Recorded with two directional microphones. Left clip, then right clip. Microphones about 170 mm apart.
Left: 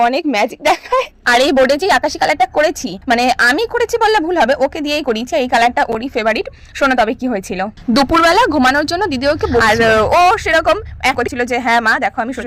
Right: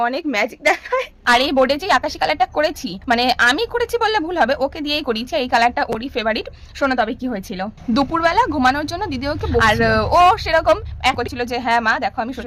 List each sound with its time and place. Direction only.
0.0 s a woman's voice: 45° left (ahead or behind)
7.9 s a woman's voice: 55° left (ahead or behind); by 12.5 s 30° left (ahead or behind)